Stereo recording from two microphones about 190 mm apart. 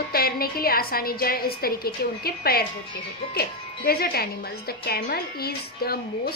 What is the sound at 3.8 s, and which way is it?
A woman's voice, 55° left (ahead or behind).